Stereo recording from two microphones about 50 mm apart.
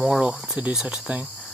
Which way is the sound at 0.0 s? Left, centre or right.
Centre.